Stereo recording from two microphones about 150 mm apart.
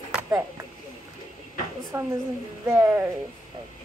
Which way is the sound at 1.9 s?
20° right (ahead or behind).